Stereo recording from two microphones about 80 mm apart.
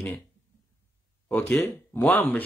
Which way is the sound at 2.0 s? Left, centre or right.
Left.